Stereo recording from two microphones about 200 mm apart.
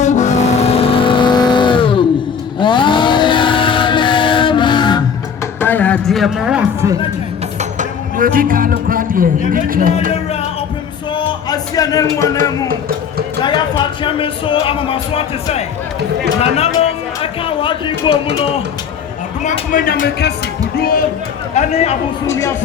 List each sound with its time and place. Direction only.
0.0 s vehicle: 35° left (ahead or behind)
2.6 s a sound: 25° left (ahead or behind)
5.5 s a sound: 10° left (ahead or behind)
7.6 s music: 40° right (ahead or behind)
9.5 s speech: 45° right (ahead or behind)
11.1 s a sound: 20° left (ahead or behind)
12.1 s speech: 15° left (ahead or behind)
13.4 s speech: 25° left (ahead or behind)
18.1 s speech: 60° right (ahead or behind)
19.5 s speech: 40° left (ahead or behind)
21.5 s speech: 35° left (ahead or behind)
22.3 s speech: 15° left (ahead or behind)